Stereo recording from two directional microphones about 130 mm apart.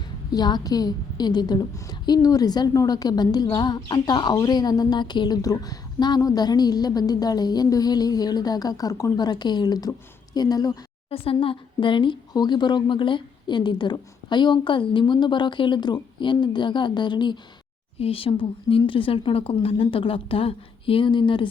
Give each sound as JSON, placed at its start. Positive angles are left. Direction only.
{"t": 0.3, "sound": "a woman's voice", "side_deg": 30}
{"t": 11.1, "sound": "a woman's voice", "side_deg": 45}